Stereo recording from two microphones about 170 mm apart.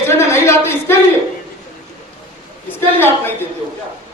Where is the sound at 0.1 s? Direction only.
15° left (ahead or behind).